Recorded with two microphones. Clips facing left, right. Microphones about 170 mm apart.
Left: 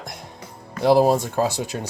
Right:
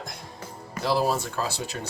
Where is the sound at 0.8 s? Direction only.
50° left (ahead or behind).